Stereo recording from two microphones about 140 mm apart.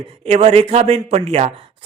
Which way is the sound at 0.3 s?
50° right (ahead or behind).